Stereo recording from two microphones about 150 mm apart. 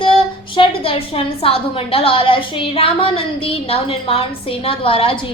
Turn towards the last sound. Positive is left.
turn(degrees=40)  # may be behind; listen again after turning